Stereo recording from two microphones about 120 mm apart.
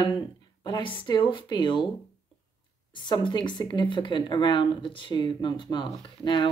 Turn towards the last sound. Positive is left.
turn(degrees=40)  # may be behind; listen again after turning